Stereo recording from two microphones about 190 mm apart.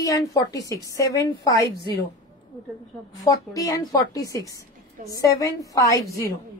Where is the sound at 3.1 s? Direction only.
20° left (ahead or behind).